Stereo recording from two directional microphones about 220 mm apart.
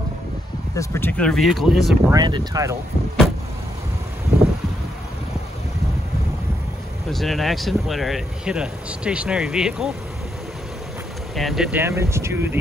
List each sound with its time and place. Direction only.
0.7 s speech: 10° left (ahead or behind)
2.1 s speech: 20° right (ahead or behind)
7.1 s speech: centre (ahead or behind)
11.3 s speech: centre (ahead or behind)